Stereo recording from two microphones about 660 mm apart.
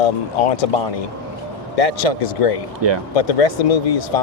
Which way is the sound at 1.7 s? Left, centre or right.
Left.